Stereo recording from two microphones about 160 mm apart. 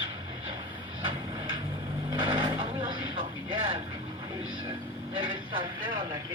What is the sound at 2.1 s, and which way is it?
Vehicle, 30° right (ahead or behind).